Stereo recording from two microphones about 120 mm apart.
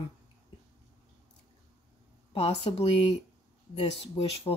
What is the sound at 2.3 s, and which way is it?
Speech, 55° left (ahead or behind).